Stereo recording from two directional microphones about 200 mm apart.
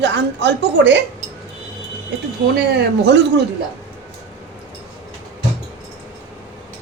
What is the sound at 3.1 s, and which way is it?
Speech, 60° right (ahead or behind).